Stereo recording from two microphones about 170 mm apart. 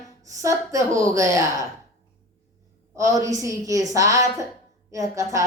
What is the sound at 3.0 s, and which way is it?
Speech, 20° right (ahead or behind).